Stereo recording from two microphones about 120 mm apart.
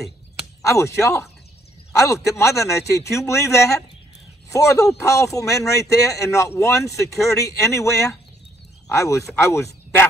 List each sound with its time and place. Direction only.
0.6 s speech: 25° left (ahead or behind)